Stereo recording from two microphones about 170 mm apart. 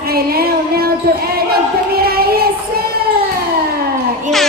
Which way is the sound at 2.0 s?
65° right (ahead or behind).